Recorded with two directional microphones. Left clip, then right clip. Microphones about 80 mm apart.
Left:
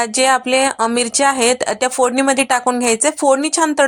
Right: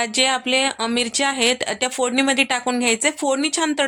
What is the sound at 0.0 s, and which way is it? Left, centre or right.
A woman's voice, left.